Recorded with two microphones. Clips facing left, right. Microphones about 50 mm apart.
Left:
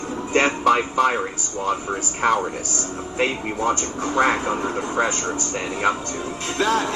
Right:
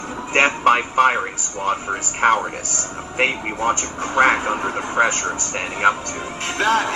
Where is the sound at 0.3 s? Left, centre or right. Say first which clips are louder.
Right 2 dB; right.